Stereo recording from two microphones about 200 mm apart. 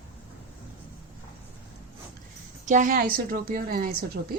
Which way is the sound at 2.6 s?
40° right (ahead or behind).